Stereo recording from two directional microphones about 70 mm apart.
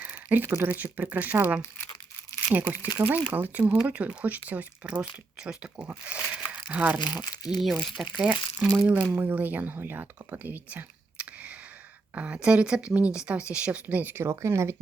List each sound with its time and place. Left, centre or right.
0.0 s speech: right
7.0 s speech: left
7.5 s speech: centre
8.1 s a woman's voice: centre; by 14.3 s right
14.3 s speech: right